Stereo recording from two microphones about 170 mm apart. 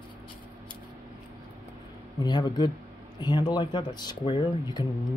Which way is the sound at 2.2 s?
25° left (ahead or behind).